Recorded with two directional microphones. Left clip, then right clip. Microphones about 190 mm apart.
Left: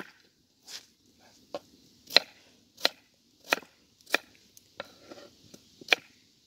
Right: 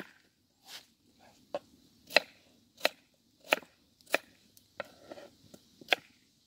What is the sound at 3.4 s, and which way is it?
Chop, 10° right (ahead or behind).